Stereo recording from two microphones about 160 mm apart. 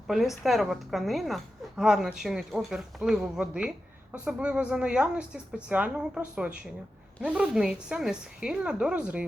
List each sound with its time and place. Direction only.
0.1 s a woman's voice: centre (ahead or behind)